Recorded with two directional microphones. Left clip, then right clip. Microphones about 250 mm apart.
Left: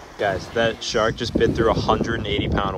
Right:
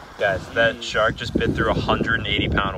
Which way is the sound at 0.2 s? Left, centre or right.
Left.